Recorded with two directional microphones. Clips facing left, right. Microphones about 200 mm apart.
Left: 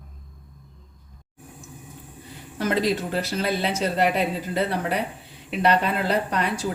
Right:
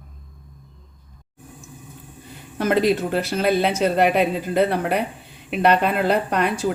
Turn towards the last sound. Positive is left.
turn(degrees=-55)  # may be behind; listen again after turning